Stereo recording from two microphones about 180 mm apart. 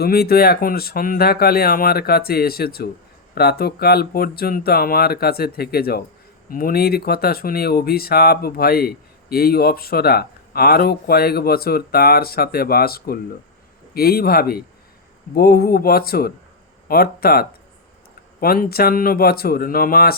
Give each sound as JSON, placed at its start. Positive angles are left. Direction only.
{"t": 0.0, "sound": "speech", "side_deg": 60}